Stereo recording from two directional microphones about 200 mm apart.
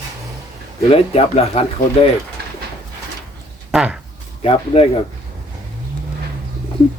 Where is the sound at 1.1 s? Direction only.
30° left (ahead or behind).